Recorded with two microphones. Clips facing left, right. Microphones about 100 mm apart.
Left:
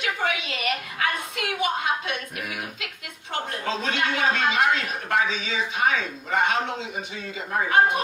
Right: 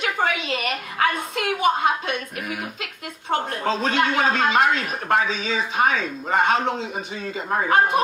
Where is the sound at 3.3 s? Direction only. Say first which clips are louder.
Right 5 dB; 40° right (ahead or behind).